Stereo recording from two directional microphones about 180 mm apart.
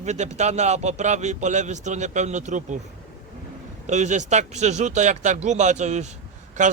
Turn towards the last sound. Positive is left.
turn(degrees=-45)  # may be behind; listen again after turning